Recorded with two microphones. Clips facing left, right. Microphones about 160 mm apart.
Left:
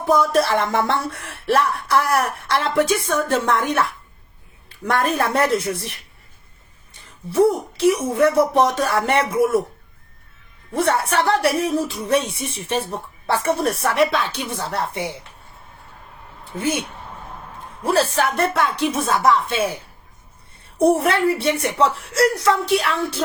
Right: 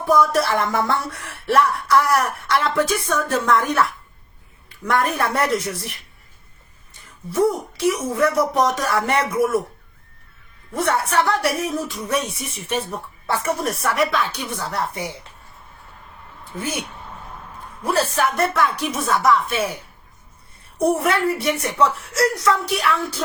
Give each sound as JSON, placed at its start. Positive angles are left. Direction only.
{"t": 0.0, "sound": "speech", "side_deg": 25}
{"t": 7.3, "sound": "speech", "side_deg": 30}
{"t": 10.8, "sound": "speech", "side_deg": 25}
{"t": 16.4, "sound": "speech", "side_deg": 25}
{"t": 17.8, "sound": "speech", "side_deg": 30}